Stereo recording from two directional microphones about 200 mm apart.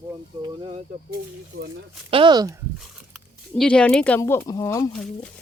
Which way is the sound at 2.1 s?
25° right (ahead or behind).